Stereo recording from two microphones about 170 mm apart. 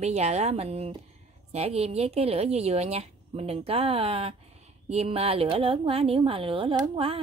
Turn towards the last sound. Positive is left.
turn(degrees=-35)  # may be behind; listen again after turning